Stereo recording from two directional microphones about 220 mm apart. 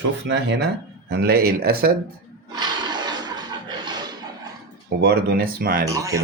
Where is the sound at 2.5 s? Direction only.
20° right (ahead or behind).